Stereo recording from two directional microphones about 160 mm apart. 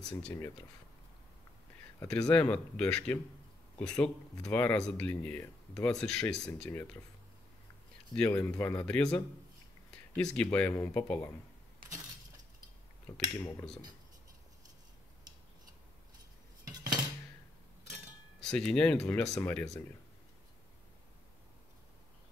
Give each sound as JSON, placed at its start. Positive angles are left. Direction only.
{"t": 2.0, "sound": "speech", "side_deg": 5}
{"t": 8.1, "sound": "speech", "side_deg": 10}
{"t": 13.4, "sound": "speech", "side_deg": 10}
{"t": 16.6, "sound": "cutlery", "side_deg": -25}
{"t": 18.4, "sound": "speech", "side_deg": 5}